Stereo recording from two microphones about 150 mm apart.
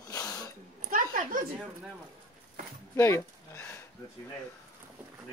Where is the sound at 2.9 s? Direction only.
15° left (ahead or behind).